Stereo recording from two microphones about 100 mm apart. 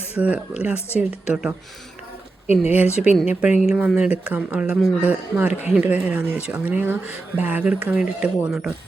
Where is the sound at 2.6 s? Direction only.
15° right (ahead or behind).